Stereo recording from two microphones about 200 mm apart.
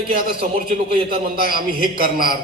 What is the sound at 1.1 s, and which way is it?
A man's voice, 45° right (ahead or behind).